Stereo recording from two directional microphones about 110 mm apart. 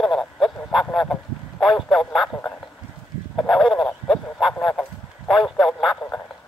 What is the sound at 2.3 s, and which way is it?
Speech, 15° left (ahead or behind).